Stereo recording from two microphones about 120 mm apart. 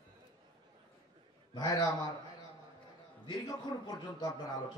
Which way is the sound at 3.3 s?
35° left (ahead or behind).